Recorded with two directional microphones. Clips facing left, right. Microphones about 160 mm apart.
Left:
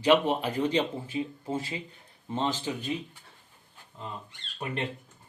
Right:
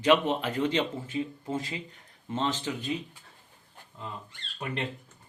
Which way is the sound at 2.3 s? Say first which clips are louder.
Even; 10° left (ahead or behind).